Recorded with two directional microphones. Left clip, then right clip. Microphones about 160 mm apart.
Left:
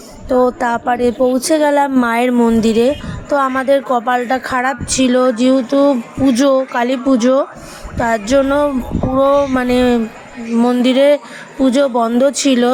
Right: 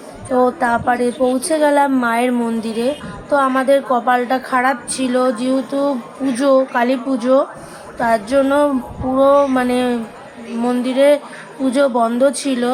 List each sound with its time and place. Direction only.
0.3 s a woman's voice: 45° left (ahead or behind)